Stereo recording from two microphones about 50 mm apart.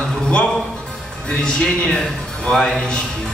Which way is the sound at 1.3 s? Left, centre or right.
Centre.